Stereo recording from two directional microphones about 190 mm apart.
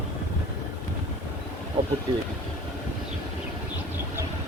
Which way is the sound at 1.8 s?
20° right (ahead or behind).